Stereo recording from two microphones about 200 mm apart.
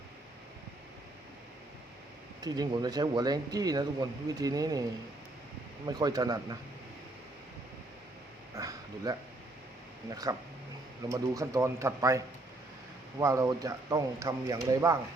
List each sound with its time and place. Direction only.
2.4 s speech: 20° right (ahead or behind)
8.5 s a sound: 15° right (ahead or behind)
10.1 s speech: 20° right (ahead or behind)